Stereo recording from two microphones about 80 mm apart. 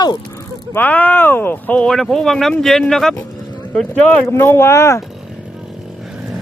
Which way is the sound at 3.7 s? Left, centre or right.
Centre.